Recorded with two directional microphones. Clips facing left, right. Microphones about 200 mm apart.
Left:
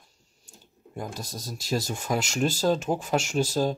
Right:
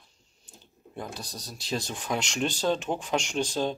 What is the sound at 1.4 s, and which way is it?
Speech, 45° left (ahead or behind).